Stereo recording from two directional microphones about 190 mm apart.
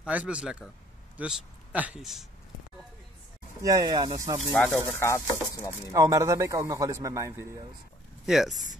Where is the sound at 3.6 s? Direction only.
20° right (ahead or behind).